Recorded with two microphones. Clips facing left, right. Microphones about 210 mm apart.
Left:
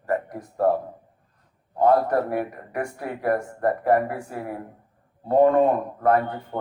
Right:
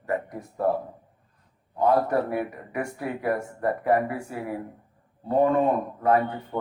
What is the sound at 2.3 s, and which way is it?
Speech, 45° left (ahead or behind).